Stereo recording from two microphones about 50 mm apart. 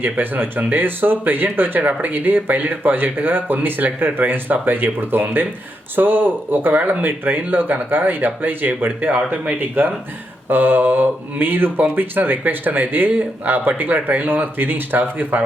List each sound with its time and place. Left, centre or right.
0.0 s speech: right
10.5 s speech: right